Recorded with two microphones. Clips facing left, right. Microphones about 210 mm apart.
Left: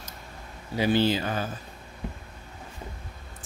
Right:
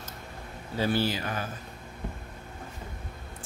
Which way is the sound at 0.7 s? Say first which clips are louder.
Left 4 dB; 15° left (ahead or behind).